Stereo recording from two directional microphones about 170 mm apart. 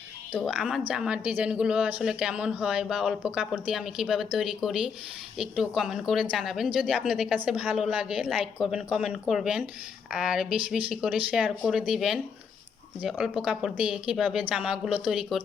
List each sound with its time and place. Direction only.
0.3 s speech: centre (ahead or behind)